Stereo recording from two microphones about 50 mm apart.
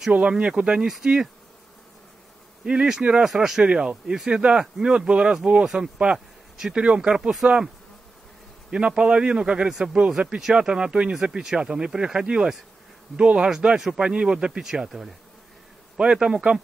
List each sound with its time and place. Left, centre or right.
0.1 s a man's voice: right
2.6 s a man's voice: centre
7.0 s speech: centre
8.6 s a man's voice: centre
16.0 s speech: centre